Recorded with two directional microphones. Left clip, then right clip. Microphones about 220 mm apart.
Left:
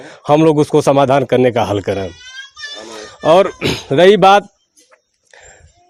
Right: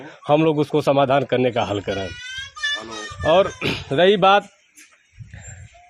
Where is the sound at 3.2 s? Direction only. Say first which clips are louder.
Left 6 dB; 45° left (ahead or behind).